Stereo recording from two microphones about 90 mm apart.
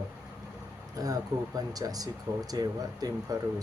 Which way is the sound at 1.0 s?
45° right (ahead or behind).